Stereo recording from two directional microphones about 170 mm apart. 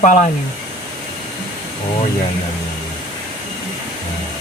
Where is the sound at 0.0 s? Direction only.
50° left (ahead or behind).